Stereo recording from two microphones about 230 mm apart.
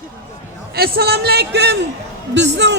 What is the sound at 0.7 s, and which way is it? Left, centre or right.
A man's voice, right.